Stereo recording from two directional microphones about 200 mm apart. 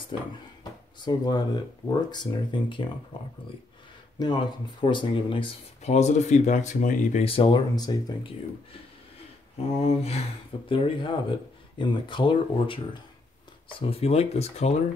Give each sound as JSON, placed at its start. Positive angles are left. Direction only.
{"t": 0.1, "sound": "speech", "side_deg": 25}
{"t": 4.2, "sound": "speech", "side_deg": 20}
{"t": 9.8, "sound": "speech", "side_deg": 30}